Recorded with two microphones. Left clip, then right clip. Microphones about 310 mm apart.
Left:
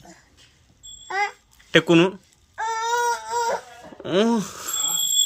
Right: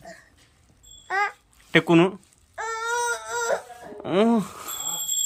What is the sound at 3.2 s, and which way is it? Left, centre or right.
Baby cry, centre.